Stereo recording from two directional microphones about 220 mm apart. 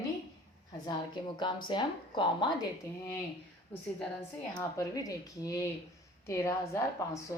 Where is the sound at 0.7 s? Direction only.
20° left (ahead or behind).